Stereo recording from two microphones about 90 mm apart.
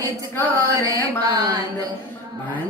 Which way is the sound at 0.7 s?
40° right (ahead or behind).